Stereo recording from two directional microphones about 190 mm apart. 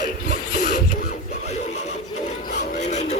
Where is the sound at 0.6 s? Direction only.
55° left (ahead or behind).